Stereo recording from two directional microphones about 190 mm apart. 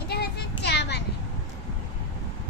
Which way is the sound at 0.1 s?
60° left (ahead or behind).